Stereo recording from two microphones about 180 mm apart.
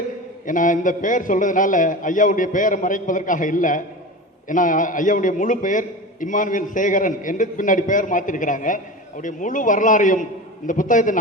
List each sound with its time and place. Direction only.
0.4 s a man's voice: 45° left (ahead or behind)